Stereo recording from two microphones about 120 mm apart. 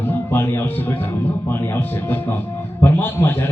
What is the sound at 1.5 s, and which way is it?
A man's voice, 20° left (ahead or behind).